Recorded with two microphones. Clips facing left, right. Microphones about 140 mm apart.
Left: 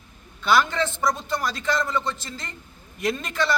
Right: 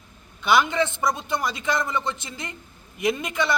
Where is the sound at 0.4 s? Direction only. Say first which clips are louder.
Right 1 dB; 15° right (ahead or behind).